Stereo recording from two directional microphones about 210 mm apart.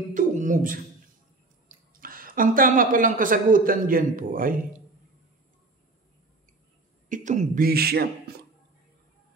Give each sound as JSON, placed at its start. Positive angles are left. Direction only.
{"t": 0.1, "sound": "beatboxing", "side_deg": -35}
{"t": 2.0, "sound": "a woman's voice", "side_deg": -40}
{"t": 7.1, "sound": "speech", "side_deg": -35}